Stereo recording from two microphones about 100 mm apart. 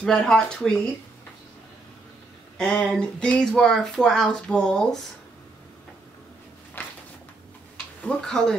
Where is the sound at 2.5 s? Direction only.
10° left (ahead or behind).